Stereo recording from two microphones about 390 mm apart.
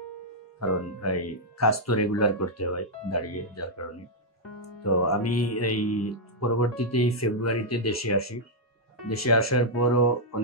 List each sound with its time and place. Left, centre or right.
0.6 s speech: left